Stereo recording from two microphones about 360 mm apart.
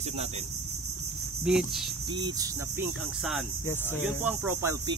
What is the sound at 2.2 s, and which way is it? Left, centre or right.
Cricket, centre.